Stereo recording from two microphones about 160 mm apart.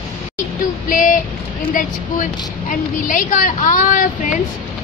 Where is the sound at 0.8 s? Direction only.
55° left (ahead or behind).